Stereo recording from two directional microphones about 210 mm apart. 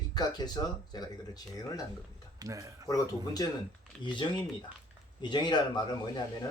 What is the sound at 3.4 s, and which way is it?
Speech, 20° left (ahead or behind).